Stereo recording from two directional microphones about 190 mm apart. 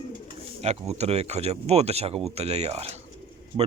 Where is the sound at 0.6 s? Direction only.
35° right (ahead or behind).